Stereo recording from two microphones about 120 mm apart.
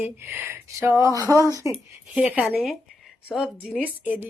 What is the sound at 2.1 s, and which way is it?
A woman's voice, 10° right (ahead or behind).